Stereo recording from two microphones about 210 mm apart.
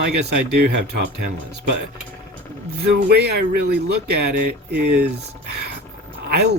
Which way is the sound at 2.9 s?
50° right (ahead or behind).